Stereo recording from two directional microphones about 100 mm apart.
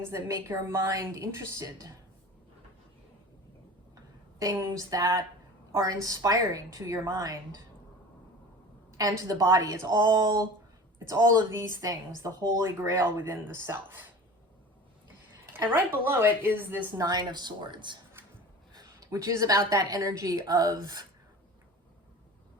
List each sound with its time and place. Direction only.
0.1 s a woman's voice: 30° right (ahead or behind)
4.4 s a woman's voice: 35° right (ahead or behind)
9.0 s a woman's voice: 35° right (ahead or behind)
13.0 s a woman's voice: 20° right (ahead or behind)
15.5 s a woman's voice: 20° right (ahead or behind)
17.0 s speech: 45° right (ahead or behind)
18.7 s a woman's voice: 40° right (ahead or behind)